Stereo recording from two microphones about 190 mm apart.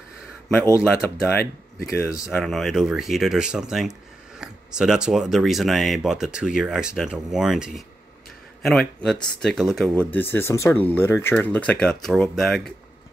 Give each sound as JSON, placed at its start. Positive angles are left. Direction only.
{"t": 0.6, "sound": "speech", "side_deg": 10}
{"t": 2.3, "sound": "speech", "side_deg": 0}